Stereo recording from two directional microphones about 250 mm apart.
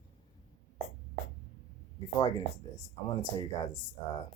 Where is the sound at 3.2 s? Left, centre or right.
Centre.